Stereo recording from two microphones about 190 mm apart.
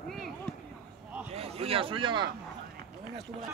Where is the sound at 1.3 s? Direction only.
30° right (ahead or behind).